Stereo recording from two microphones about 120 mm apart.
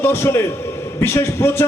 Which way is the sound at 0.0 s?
20° left (ahead or behind).